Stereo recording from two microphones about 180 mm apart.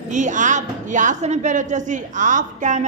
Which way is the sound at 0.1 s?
45° right (ahead or behind).